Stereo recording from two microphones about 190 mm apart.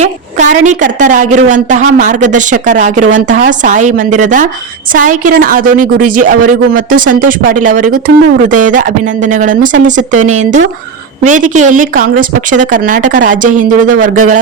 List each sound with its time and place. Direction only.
0.0 s a woman's voice: 40° right (ahead or behind)